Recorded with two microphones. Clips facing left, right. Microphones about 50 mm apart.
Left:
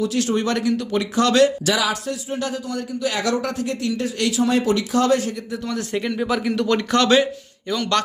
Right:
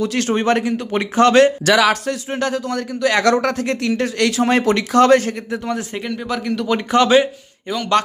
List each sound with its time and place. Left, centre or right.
0.0 s speech: right
1.6 s a man's voice: right
6.1 s a man's voice: centre
6.7 s speech: centre